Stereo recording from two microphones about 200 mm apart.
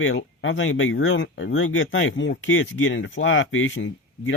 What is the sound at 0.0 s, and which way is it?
Speech, 75° left (ahead or behind).